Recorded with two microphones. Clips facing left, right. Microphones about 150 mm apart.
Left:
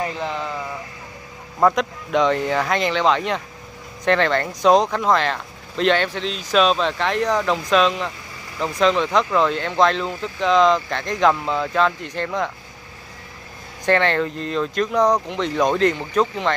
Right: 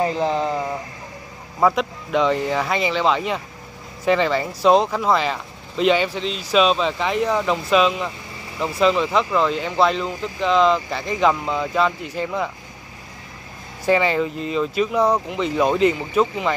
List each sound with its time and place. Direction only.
0.0 s a sound: 35° right (ahead or behind)
1.6 s speech: 5° right (ahead or behind)
13.8 s speech: 5° right (ahead or behind)